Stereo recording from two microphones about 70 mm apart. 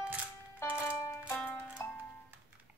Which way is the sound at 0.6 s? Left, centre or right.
Left.